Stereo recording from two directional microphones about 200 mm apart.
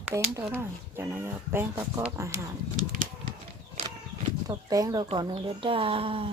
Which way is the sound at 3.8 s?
35° right (ahead or behind).